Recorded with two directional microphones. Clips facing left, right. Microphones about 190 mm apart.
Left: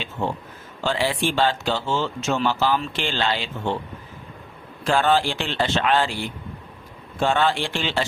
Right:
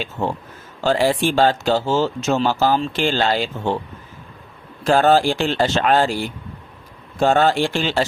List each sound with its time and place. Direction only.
0.8 s speech: 40° right (ahead or behind)
4.8 s speech: 40° right (ahead or behind)